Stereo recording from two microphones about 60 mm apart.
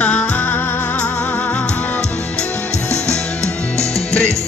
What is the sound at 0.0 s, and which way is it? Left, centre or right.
Music, left.